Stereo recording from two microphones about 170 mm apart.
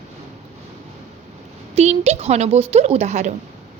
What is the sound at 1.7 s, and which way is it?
A woman's voice, 40° right (ahead or behind).